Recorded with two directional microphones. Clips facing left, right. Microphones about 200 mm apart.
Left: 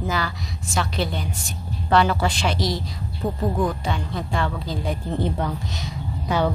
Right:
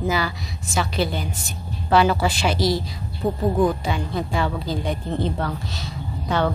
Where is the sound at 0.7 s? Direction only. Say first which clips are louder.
Right 2 dB; 5° right (ahead or behind).